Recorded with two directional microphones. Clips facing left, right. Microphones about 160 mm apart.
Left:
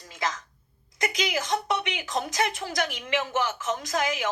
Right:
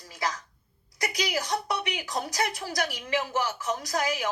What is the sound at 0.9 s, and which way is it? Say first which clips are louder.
A woman's voice: left 2 dB; 20° left (ahead or behind).